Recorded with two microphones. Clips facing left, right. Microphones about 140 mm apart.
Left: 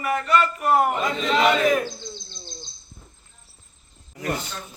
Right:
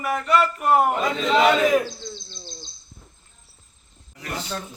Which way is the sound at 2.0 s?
30° right (ahead or behind).